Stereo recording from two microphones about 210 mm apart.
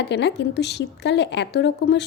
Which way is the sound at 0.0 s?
55° left (ahead or behind).